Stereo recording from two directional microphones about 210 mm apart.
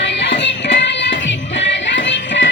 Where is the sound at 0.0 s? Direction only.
55° left (ahead or behind).